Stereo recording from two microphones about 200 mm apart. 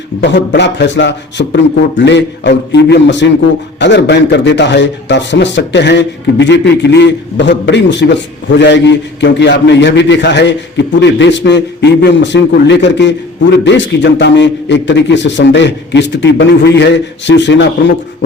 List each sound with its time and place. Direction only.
0.2 s a man's voice: 60° left (ahead or behind)